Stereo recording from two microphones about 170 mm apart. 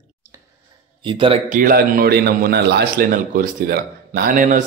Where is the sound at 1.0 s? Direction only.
30° right (ahead or behind).